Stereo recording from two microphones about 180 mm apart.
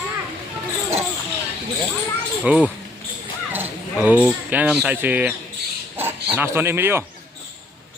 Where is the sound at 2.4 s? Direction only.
5° right (ahead or behind).